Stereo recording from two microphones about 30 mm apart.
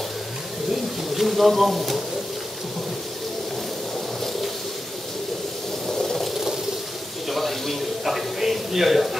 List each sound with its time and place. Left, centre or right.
1.1 s speech: centre
5.9 s a sound: centre
8.1 s speech: centre